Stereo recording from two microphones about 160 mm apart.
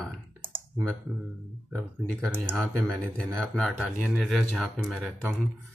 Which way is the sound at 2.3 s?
15° right (ahead or behind).